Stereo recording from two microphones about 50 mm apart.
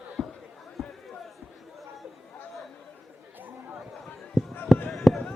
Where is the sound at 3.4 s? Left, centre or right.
Right.